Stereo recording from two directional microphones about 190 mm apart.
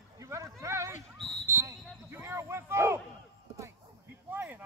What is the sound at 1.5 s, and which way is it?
Smoke detector, 15° right (ahead or behind).